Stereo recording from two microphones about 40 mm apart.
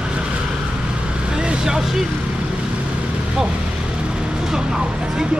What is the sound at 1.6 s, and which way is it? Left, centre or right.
Speech, centre.